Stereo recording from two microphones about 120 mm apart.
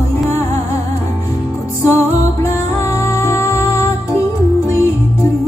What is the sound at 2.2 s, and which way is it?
Music, 20° left (ahead or behind).